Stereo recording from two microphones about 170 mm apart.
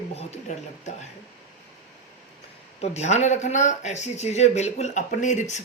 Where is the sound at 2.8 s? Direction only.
40° left (ahead or behind).